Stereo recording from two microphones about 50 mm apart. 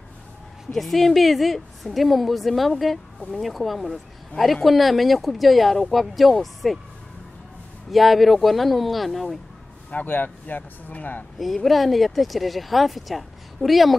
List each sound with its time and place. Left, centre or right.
0.7 s speech: centre
7.9 s speech: centre
9.8 s speech: left
11.3 s speech: centre